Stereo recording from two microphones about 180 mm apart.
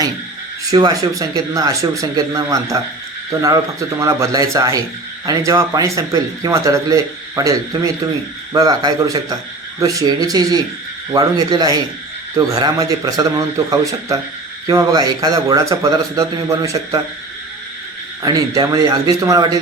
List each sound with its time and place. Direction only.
0.7 s a man's voice: 20° right (ahead or behind)
18.2 s a man's voice: 20° right (ahead or behind)